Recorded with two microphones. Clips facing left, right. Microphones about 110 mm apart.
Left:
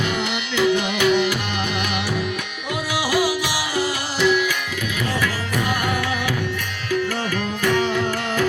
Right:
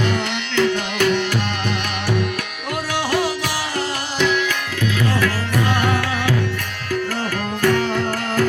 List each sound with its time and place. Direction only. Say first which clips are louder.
0.5 s music: even; 10° left (ahead or behind)
3.1 s music: left 1 dB; 5° left (ahead or behind)
7.6 s music: right 2 dB; 40° right (ahead or behind)